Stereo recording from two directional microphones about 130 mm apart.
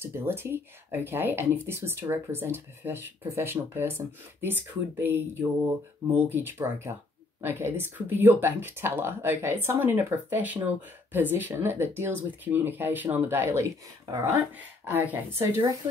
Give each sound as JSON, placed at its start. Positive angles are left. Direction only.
{"t": 0.0, "sound": "speech", "side_deg": -20}
{"t": 14.6, "sound": "speech", "side_deg": -15}